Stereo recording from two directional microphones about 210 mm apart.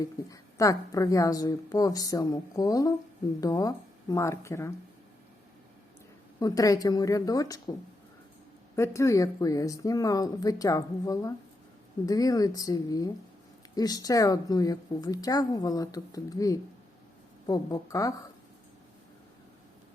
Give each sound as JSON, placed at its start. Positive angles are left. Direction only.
{"t": 0.0, "sound": "a woman's voice", "side_deg": 15}
{"t": 6.4, "sound": "a woman's voice", "side_deg": 15}
{"t": 8.7, "sound": "a woman's voice", "side_deg": 15}